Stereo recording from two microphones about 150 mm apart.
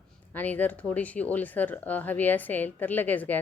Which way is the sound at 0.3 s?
10° left (ahead or behind).